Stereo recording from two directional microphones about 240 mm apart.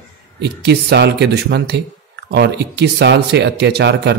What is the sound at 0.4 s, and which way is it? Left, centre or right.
Speech, right.